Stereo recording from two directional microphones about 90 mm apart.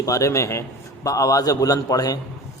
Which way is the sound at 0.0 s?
35° left (ahead or behind).